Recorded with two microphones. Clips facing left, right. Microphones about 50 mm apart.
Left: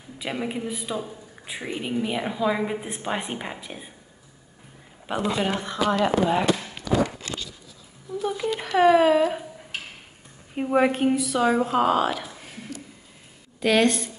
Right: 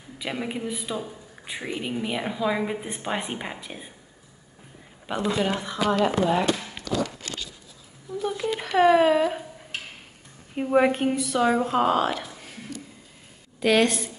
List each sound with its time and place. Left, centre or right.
0.2 s a man's voice: centre
5.4 s a woman's voice: left
6.1 s speech: left
6.9 s a sound: centre
8.1 s a sound: centre
8.5 s a man's voice: centre
13.6 s a man's voice: centre